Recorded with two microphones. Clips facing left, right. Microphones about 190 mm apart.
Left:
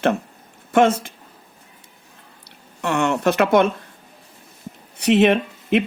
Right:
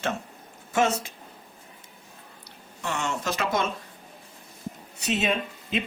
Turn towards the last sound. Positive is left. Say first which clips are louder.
# left 10 dB
turn(degrees=70)  # may be behind; listen again after turning